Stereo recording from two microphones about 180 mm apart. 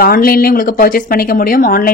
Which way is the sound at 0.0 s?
55° left (ahead or behind).